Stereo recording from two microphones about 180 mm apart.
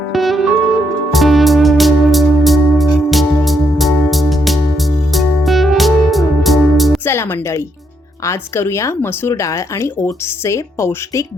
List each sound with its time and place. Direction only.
0.1 s music: centre (ahead or behind)
7.0 s music: 15° left (ahead or behind)
8.2 s speech: 15° left (ahead or behind)